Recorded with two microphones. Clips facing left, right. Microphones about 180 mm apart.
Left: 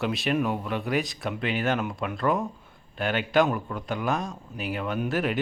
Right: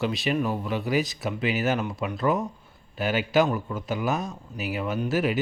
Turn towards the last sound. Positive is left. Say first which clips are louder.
# right 2 dB
turn(degrees=-5)  # may be behind; listen again after turning